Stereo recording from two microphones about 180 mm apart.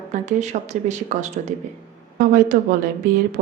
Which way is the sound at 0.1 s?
40° right (ahead or behind).